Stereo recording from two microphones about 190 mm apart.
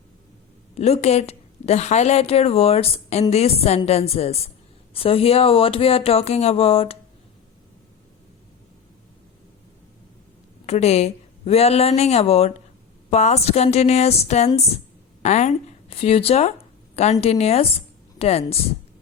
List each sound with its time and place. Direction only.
0.8 s a woman's voice: 35° left (ahead or behind)
10.7 s a woman's voice: 35° left (ahead or behind)